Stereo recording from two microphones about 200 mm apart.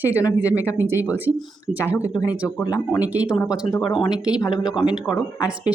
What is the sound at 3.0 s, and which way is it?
Speech, 5° right (ahead or behind).